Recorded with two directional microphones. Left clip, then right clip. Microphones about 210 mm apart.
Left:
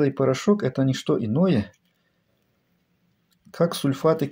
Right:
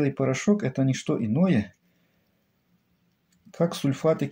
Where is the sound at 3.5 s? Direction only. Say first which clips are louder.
Left 3 dB; 15° left (ahead or behind).